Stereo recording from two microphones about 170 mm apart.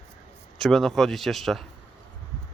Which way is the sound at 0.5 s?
Centre (ahead or behind).